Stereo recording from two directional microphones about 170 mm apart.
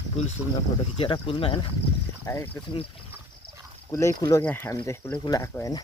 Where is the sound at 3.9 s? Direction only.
20° left (ahead or behind).